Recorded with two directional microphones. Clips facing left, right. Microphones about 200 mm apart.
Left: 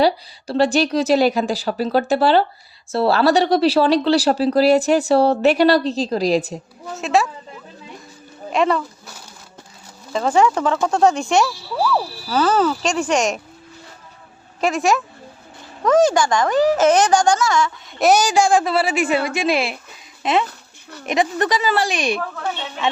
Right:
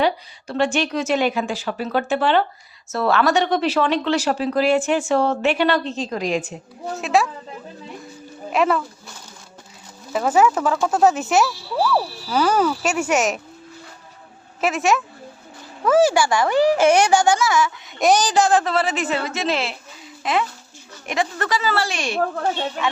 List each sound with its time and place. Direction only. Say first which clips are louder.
0.0 s speech: left 3 dB; 35° left (ahead or behind)
7.0 s speech: left 1 dB; centre (ahead or behind)
8.5 s speech: left 1 dB; 5° right (ahead or behind)
10.1 s speech: left 1 dB; 5° right (ahead or behind)
14.6 s speech: left 1 dB; centre (ahead or behind)
18.0 s a woman's voice: left 2 dB; 10° left (ahead or behind)
20.2 s a woman's voice: left 3 dB; 25° left (ahead or behind)